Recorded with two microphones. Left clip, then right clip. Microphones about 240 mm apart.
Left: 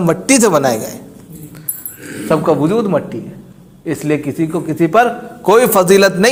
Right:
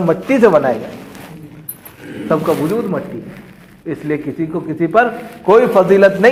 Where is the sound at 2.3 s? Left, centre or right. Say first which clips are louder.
Left 3 dB; left.